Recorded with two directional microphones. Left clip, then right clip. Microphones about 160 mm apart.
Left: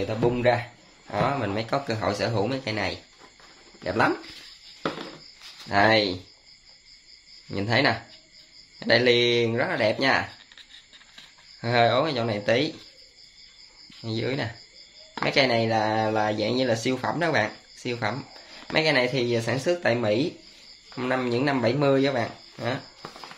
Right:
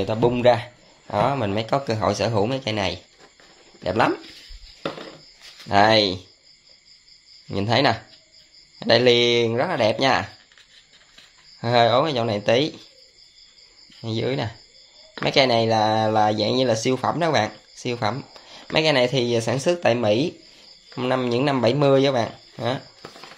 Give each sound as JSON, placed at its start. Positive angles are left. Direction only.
{"t": 0.0, "sound": "speech", "side_deg": -50}
{"t": 5.7, "sound": "speech", "side_deg": -45}
{"t": 7.5, "sound": "speech", "side_deg": -40}
{"t": 11.6, "sound": "speech", "side_deg": -40}
{"t": 14.0, "sound": "speech", "side_deg": -35}